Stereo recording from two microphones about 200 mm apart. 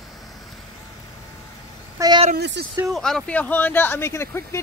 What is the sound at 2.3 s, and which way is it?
Speech, 60° right (ahead or behind).